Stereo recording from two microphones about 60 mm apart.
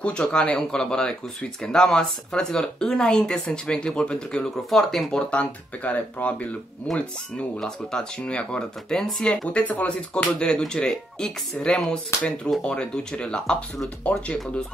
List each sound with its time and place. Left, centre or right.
0.0 s speech: centre
4.6 s speech: centre
5.3 s speech: left
7.5 s speech: centre